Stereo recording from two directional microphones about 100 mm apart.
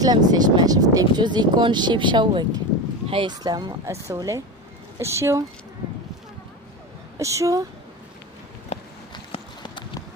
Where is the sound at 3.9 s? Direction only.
30° right (ahead or behind).